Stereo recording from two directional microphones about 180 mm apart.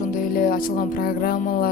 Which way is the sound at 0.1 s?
50° left (ahead or behind).